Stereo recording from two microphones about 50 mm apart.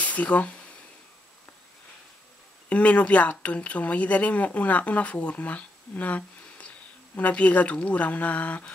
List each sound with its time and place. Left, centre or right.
0.0 s speech: left
2.7 s speech: left